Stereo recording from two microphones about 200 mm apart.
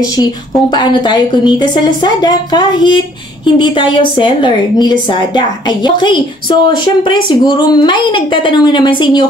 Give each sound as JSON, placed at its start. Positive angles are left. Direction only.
{"t": 0.0, "sound": "a woman's voice", "side_deg": 20}